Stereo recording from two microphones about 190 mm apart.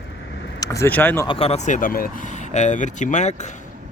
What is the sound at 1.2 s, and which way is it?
Speech, 30° left (ahead or behind).